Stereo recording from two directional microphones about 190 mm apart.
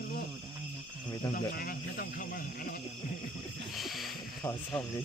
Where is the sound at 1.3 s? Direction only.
50° left (ahead or behind).